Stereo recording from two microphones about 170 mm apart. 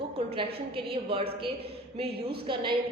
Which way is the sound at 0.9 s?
30° right (ahead or behind).